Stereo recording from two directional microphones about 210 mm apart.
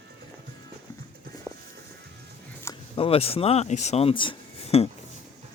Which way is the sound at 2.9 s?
25° left (ahead or behind).